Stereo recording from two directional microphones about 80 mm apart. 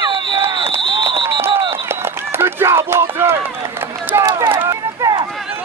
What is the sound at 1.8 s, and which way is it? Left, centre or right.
Run, right.